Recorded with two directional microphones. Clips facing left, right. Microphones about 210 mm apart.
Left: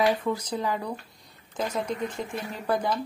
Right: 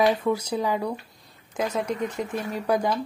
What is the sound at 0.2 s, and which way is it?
A woman's voice, 10° right (ahead or behind).